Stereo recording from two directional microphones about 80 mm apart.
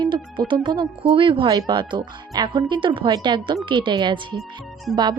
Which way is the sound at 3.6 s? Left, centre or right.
Right.